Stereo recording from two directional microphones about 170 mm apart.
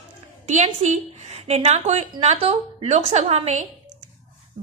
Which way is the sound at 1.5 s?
40° right (ahead or behind).